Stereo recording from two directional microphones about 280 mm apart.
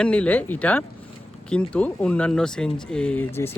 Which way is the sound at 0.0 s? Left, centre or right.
Centre.